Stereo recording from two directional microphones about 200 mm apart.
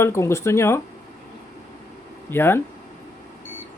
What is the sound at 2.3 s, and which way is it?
Speech, 10° left (ahead or behind).